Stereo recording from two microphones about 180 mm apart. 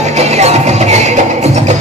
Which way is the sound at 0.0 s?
40° right (ahead or behind).